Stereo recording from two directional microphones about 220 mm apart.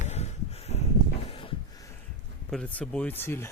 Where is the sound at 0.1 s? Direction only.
30° left (ahead or behind).